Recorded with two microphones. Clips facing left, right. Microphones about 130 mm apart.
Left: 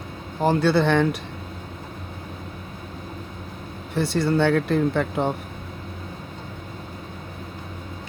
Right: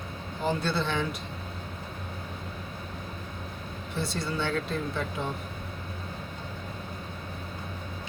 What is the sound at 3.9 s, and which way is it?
Speech, 70° left (ahead or behind).